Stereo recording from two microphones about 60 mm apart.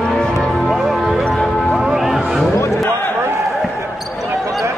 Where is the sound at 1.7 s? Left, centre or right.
Centre.